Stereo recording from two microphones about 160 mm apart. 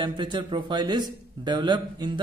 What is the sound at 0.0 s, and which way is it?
A man's voice, 30° right (ahead or behind).